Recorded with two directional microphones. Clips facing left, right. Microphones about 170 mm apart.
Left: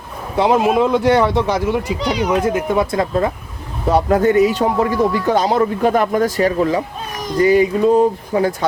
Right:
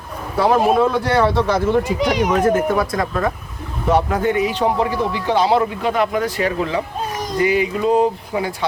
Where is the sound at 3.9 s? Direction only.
40° left (ahead or behind).